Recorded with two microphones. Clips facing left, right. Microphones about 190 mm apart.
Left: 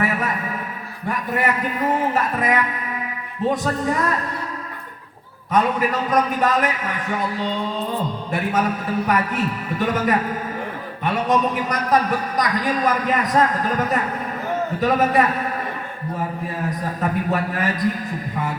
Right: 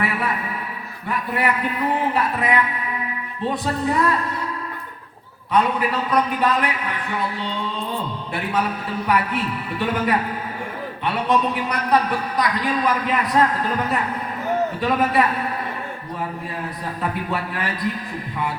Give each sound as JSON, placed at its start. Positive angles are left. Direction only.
{"t": 0.0, "sound": "music", "side_deg": 45}
{"t": 1.0, "sound": "a man's voice", "side_deg": 45}
{"t": 5.5, "sound": "a man's voice", "side_deg": 45}
{"t": 9.0, "sound": "a man's voice", "side_deg": 45}
{"t": 17.0, "sound": "a man's voice", "side_deg": 45}